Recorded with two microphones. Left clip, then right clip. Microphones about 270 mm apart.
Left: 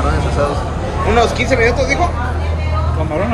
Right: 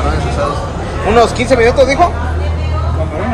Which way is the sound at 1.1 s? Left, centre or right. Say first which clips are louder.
Right 4 dB; centre.